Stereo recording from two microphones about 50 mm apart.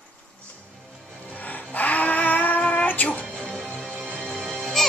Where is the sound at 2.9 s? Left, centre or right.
Left.